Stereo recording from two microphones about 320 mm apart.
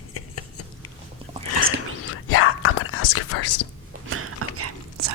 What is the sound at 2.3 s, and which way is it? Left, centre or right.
Whispering, left.